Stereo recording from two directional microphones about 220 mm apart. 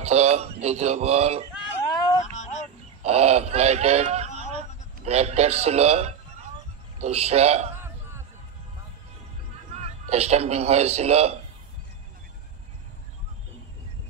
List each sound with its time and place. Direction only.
0.0 s speech: 30° right (ahead or behind)
2.3 s a sound: 35° left (ahead or behind)
3.0 s a man's voice: 30° right (ahead or behind)
7.7 s music: 10° right (ahead or behind)
9.8 s a man's voice: 30° right (ahead or behind)